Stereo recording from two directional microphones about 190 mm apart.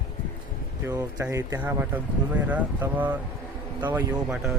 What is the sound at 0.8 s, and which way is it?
Speech, 15° right (ahead or behind).